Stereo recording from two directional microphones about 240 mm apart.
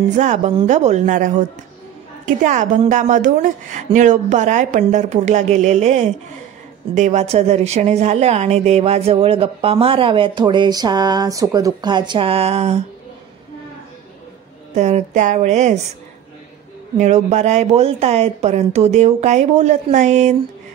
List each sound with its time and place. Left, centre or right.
0.1 s a woman's voice: right
14.7 s speech: right
17.0 s speech: right